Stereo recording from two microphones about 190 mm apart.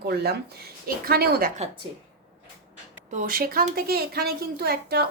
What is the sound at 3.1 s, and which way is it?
A woman's voice, 45° right (ahead or behind).